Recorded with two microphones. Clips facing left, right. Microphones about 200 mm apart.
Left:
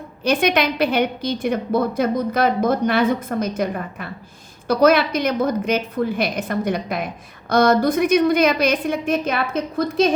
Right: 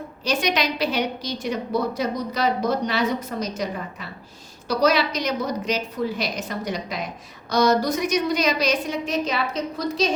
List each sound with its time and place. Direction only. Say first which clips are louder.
0.3 s a woman's voice: left 5 dB; 55° left (ahead or behind)